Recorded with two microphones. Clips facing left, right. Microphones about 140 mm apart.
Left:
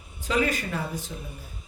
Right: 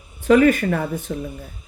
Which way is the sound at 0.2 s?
55° right (ahead or behind).